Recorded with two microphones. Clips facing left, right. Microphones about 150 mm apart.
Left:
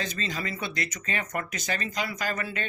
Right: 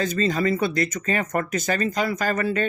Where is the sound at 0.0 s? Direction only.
45° right (ahead or behind).